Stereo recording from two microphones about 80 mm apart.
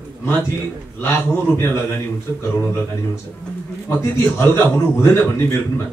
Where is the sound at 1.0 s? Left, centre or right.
Left.